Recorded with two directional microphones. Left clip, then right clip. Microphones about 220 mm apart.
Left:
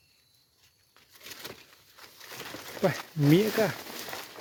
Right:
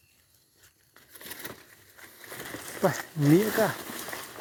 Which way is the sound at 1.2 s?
25° right (ahead or behind).